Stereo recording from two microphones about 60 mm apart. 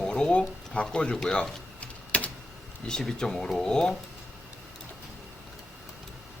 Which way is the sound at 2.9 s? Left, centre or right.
Centre.